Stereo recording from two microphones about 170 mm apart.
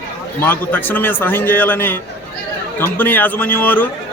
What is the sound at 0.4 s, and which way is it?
A man's voice, 10° left (ahead or behind).